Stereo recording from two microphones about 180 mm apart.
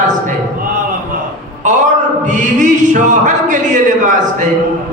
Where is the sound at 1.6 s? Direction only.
45° right (ahead or behind).